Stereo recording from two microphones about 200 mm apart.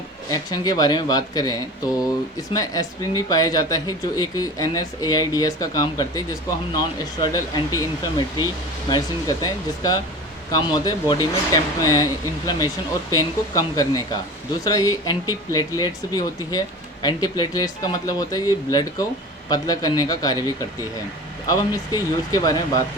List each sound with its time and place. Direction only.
0.3 s speech: 20° left (ahead or behind)
8.9 s speech: 20° left (ahead or behind)
21.4 s speech: 15° left (ahead or behind)